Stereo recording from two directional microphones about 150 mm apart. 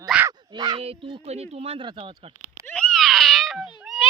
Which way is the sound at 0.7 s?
40° right (ahead or behind).